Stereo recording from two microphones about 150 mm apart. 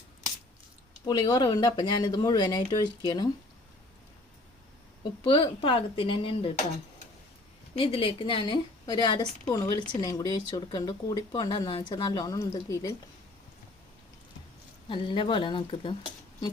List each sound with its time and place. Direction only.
1.0 s speech: 30° left (ahead or behind)
5.2 s a woman's voice: 35° left (ahead or behind)
7.8 s a woman's voice: 35° left (ahead or behind); by 12.9 s 20° left (ahead or behind)
14.8 s a woman's voice: 35° left (ahead or behind)